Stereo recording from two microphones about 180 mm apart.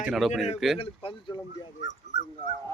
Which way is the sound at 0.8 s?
30° left (ahead or behind).